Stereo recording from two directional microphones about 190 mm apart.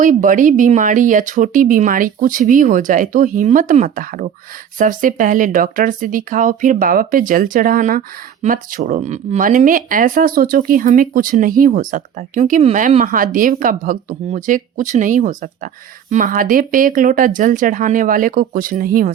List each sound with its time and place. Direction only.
0.0 s speech: 45° right (ahead or behind)